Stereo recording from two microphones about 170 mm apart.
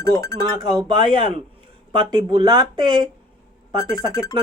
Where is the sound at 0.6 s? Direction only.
25° right (ahead or behind).